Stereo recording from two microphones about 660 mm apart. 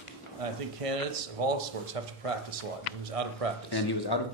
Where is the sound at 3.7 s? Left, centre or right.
Left.